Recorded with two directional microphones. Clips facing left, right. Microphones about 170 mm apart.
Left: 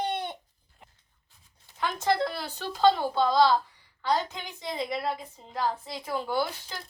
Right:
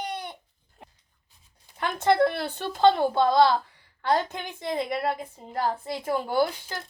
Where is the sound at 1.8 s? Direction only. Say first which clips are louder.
Right 5 dB; 60° right (ahead or behind).